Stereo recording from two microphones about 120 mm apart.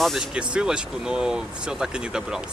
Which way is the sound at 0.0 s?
5° right (ahead or behind).